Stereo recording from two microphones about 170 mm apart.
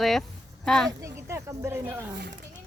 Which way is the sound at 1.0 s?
15° right (ahead or behind).